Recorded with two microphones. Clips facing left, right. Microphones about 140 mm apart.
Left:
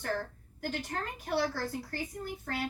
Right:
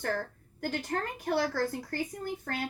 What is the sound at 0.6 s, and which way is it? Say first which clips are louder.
A woman's voice: right 3 dB; 50° right (ahead or behind).